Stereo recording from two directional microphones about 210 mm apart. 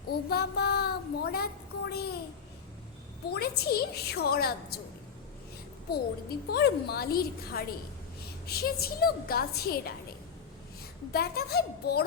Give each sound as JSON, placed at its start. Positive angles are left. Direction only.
{"t": 0.1, "sound": "a sound", "side_deg": 50}
{"t": 3.2, "sound": "a woman's voice", "side_deg": 50}
{"t": 6.5, "sound": "a woman's voice", "side_deg": 50}
{"t": 11.1, "sound": "a woman's voice", "side_deg": 50}